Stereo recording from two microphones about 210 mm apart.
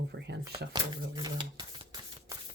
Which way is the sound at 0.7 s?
20° right (ahead or behind).